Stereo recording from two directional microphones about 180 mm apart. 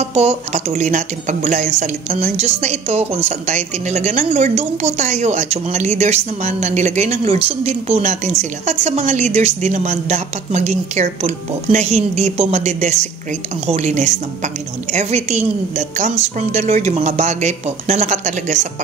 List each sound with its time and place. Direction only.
0.0 s speech: 35° right (ahead or behind)